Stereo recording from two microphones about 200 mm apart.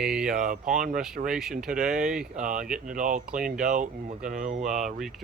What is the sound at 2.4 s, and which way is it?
Speech, 40° right (ahead or behind).